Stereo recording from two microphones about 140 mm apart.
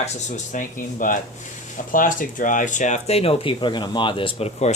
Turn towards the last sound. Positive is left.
turn(degrees=50)  # may be behind; listen again after turning